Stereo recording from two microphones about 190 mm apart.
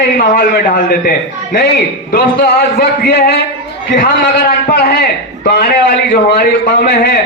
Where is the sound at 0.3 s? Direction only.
55° left (ahead or behind).